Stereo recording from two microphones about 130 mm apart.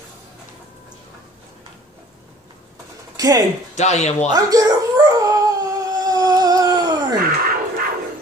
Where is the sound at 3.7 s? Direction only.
60° left (ahead or behind).